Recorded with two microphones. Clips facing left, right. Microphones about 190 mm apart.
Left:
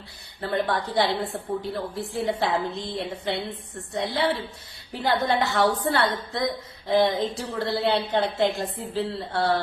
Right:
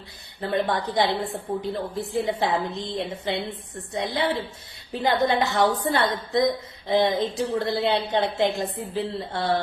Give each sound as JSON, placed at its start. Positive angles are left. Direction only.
{"t": 0.4, "sound": "a woman's voice", "side_deg": -20}